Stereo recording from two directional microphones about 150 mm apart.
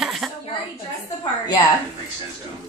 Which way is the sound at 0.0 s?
Centre (ahead or behind).